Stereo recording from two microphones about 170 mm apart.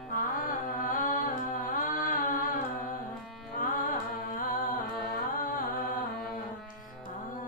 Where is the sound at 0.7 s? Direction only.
50° left (ahead or behind).